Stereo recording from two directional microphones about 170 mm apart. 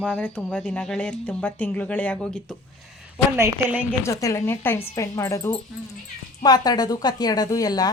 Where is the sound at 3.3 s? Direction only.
15° right (ahead or behind).